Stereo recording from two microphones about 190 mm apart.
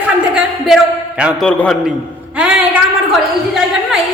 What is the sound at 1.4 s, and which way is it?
Speech, 5° left (ahead or behind).